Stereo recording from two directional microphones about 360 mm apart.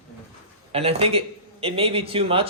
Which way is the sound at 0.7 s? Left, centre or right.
Centre.